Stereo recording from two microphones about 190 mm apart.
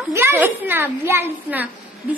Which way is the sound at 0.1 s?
10° right (ahead or behind).